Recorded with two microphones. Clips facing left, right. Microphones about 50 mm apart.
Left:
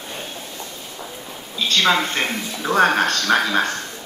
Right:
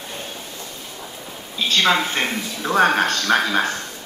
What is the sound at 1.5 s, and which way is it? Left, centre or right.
Speech, centre.